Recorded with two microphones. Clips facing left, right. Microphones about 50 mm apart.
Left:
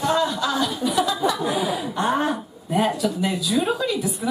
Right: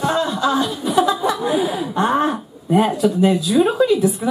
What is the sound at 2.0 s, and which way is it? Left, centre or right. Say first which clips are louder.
Speech: right 5 dB; centre.